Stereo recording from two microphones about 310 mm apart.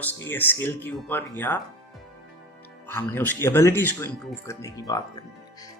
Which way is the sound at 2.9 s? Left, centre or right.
Centre.